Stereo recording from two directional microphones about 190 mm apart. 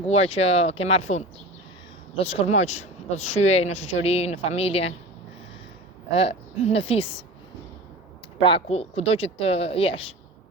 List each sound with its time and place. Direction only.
0.1 s speech: 35° left (ahead or behind)
6.1 s a woman's voice: 30° left (ahead or behind)
8.4 s speech: 25° left (ahead or behind)